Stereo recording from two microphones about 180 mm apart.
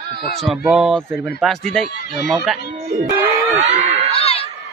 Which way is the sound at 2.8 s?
35° right (ahead or behind).